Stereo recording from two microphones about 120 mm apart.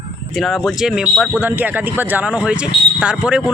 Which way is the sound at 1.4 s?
15° right (ahead or behind).